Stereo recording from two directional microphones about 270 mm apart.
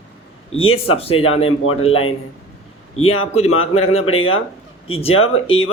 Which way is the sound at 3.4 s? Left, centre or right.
Left.